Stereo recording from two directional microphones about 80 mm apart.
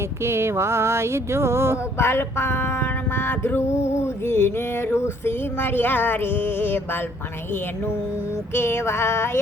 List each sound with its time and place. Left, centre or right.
0.2 s a sound: right
2.0 s female singing: left
8.5 s female singing: left